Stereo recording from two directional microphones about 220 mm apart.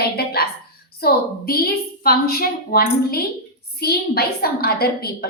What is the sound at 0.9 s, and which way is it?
A woman's voice, 45° left (ahead or behind).